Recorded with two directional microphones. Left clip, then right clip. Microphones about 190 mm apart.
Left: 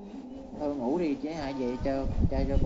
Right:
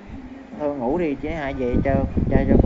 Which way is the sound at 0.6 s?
30° right (ahead or behind).